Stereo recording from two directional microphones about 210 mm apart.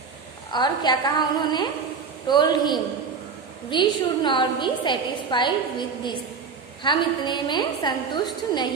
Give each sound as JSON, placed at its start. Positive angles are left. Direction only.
{"t": 0.5, "sound": "a woman's voice", "side_deg": 20}